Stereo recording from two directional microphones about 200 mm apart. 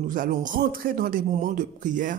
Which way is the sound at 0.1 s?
40° right (ahead or behind).